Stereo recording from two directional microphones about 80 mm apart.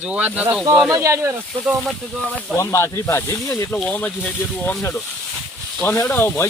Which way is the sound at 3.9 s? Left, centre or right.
Left.